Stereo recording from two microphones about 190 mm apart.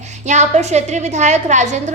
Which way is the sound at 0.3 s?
40° right (ahead or behind).